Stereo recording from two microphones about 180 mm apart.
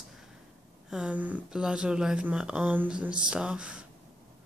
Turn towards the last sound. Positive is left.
turn(degrees=-5)  # may be behind; listen again after turning